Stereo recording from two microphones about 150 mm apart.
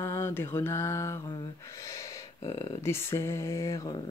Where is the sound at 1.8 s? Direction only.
20° left (ahead or behind).